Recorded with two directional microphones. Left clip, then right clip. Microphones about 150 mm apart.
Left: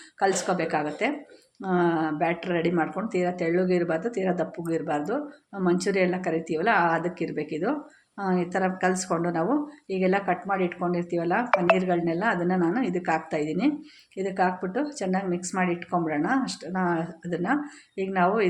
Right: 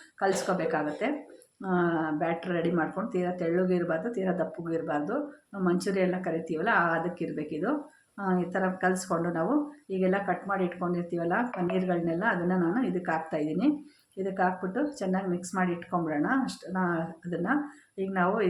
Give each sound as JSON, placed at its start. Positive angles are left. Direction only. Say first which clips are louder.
{"t": 0.2, "sound": "speech", "louder": "left 3 dB", "side_deg": 15}